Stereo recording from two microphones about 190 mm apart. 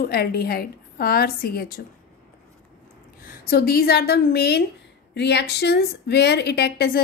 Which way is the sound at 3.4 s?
55° left (ahead or behind).